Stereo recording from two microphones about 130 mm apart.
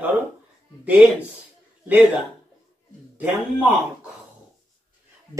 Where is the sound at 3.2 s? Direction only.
15° right (ahead or behind).